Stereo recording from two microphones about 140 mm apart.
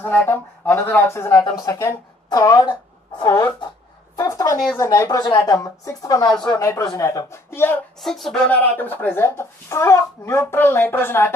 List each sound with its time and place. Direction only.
0.0 s speech: 15° left (ahead or behind)
1.4 s speech: 25° left (ahead or behind)
2.2 s a sound: 25° left (ahead or behind)
3.3 s speech: 20° left (ahead or behind)
4.2 s a sound: 25° left (ahead or behind)
4.7 s speech: 25° left (ahead or behind)
8.0 s speech: centre (ahead or behind)